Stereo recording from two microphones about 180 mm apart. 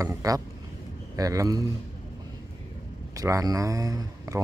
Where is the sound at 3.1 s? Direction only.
20° right (ahead or behind).